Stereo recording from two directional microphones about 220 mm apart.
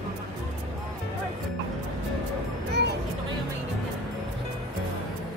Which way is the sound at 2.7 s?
50° right (ahead or behind).